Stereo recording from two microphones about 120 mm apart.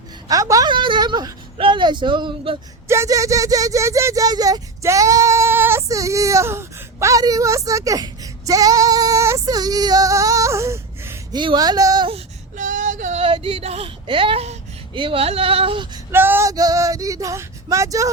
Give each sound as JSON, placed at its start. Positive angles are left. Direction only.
{"t": 0.3, "sound": "speech", "side_deg": -30}
{"t": 0.7, "sound": "speech", "side_deg": -40}
{"t": 2.8, "sound": "speech", "side_deg": -25}
{"t": 11.3, "sound": "speech", "side_deg": -35}
{"t": 12.5, "sound": "female singing", "side_deg": -90}
{"t": 13.2, "sound": "speech", "side_deg": -50}
{"t": 16.1, "sound": "male singing", "side_deg": -20}
{"t": 16.5, "sound": "speech", "side_deg": -30}